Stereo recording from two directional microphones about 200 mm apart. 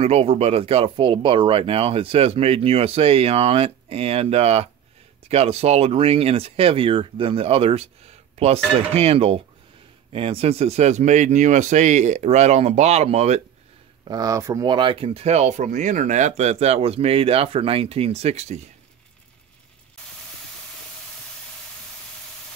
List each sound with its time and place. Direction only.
0.0 s speech: 30° right (ahead or behind)
14.0 s speech: 20° right (ahead or behind); by 18.6 s 35° right (ahead or behind)